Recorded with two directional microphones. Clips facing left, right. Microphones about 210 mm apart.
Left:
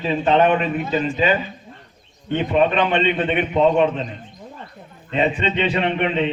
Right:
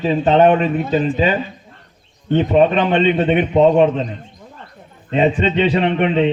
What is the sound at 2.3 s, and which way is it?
A man's voice, 35° right (ahead or behind).